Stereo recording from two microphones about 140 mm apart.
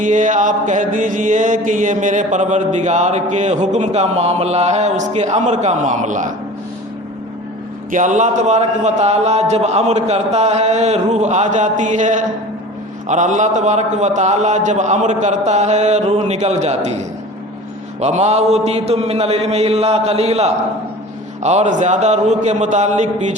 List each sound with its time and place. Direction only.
0.0 s mantra: 65° right (ahead or behind)
7.9 s speech: 65° right (ahead or behind)
13.1 s mantra: 60° right (ahead or behind)
18.0 s speech: 50° right (ahead or behind)
21.4 s mantra: 55° right (ahead or behind)